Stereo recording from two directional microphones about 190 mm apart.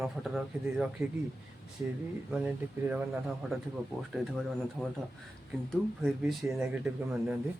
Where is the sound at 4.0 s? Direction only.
Centre (ahead or behind).